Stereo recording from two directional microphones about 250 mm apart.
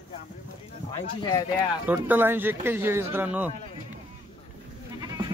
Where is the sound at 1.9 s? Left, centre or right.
Centre.